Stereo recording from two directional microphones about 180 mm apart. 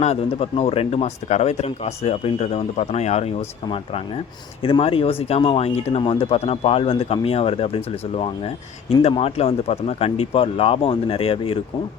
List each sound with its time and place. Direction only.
0.0 s speech: 35° left (ahead or behind)